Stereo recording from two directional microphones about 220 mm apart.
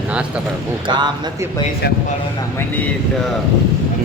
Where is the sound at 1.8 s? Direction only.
45° left (ahead or behind).